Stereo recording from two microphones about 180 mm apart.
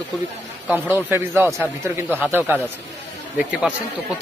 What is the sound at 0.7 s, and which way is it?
Speech, 10° right (ahead or behind).